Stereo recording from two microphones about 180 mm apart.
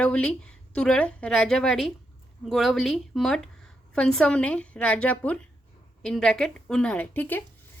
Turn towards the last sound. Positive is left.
turn(degrees=10)  # may be behind; listen again after turning